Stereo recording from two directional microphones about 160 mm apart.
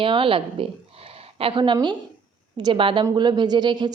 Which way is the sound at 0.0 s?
35° right (ahead or behind).